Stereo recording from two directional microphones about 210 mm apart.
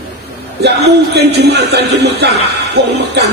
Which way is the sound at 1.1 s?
50° right (ahead or behind).